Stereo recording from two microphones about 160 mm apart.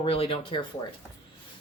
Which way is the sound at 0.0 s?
35° left (ahead or behind).